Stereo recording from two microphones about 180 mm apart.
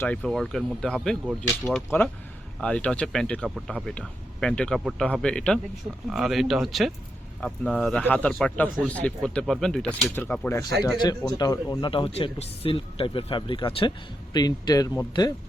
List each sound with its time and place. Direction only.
0.0 s speech: 5° left (ahead or behind)
10.9 s speech: 25° left (ahead or behind)